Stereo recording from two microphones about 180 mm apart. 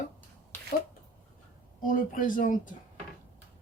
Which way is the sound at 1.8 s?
50° left (ahead or behind).